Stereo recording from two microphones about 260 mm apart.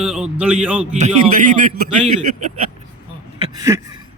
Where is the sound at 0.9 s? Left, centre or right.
Right.